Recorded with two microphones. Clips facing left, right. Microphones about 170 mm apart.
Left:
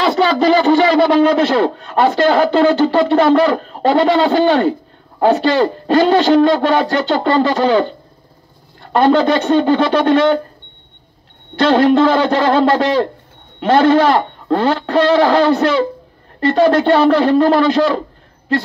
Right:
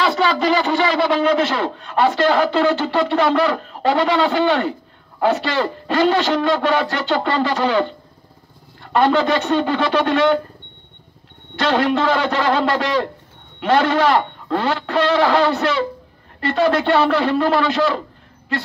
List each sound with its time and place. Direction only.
0.0 s a man's voice: 35° left (ahead or behind)
11.5 s a man's voice: 35° left (ahead or behind)